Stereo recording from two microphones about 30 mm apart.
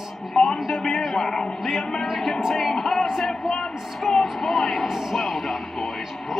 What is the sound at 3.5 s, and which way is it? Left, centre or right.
Speech, centre.